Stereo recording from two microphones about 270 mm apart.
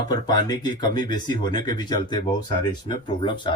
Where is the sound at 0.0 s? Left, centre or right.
Centre.